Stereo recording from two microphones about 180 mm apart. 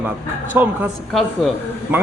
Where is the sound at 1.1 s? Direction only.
Centre (ahead or behind).